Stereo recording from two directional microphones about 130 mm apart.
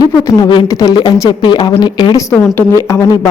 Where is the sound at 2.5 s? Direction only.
20° left (ahead or behind).